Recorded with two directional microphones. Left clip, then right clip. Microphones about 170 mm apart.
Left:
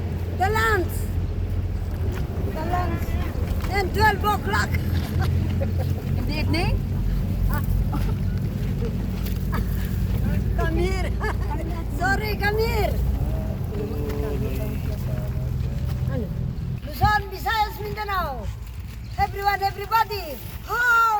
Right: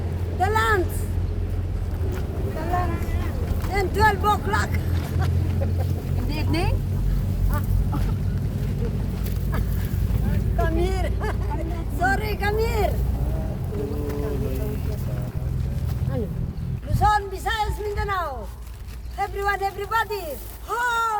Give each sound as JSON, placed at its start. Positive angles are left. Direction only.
{"t": 0.3, "sound": "vehicle", "side_deg": 0}
{"t": 3.7, "sound": "vehicle", "side_deg": 0}
{"t": 6.3, "sound": "boat", "side_deg": 30}
{"t": 10.6, "sound": "vehicle", "side_deg": -50}
{"t": 11.9, "sound": "vehicle", "side_deg": -25}
{"t": 12.2, "sound": "vehicle", "side_deg": -10}
{"t": 17.0, "sound": "a sound", "side_deg": 0}
{"t": 19.2, "sound": "speech", "side_deg": -10}
{"t": 20.7, "sound": "cat", "side_deg": -15}